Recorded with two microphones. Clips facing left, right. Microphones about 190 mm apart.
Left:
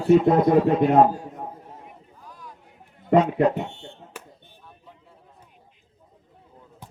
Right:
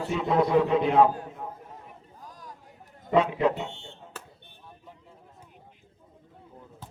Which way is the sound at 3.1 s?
50° left (ahead or behind).